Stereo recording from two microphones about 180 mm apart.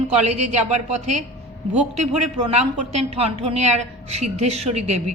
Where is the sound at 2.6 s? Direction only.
35° right (ahead or behind).